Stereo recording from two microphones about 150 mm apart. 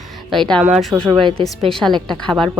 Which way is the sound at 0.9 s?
25° right (ahead or behind).